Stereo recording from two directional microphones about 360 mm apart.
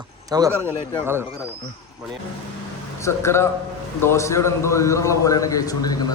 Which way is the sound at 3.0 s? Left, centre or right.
Centre.